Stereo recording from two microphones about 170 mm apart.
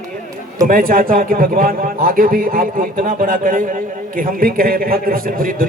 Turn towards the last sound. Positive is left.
turn(degrees=-55)  # may be behind; listen again after turning